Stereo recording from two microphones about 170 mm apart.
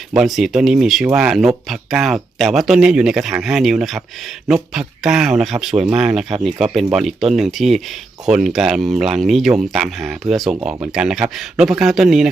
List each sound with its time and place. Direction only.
0.1 s speech: centre (ahead or behind)